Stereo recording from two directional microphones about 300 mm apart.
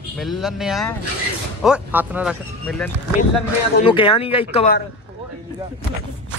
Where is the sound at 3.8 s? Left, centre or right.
Centre.